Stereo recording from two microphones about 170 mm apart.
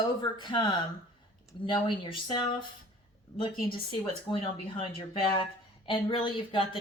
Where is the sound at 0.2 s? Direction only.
25° left (ahead or behind).